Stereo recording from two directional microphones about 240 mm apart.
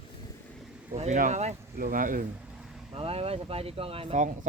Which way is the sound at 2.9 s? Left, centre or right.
Right.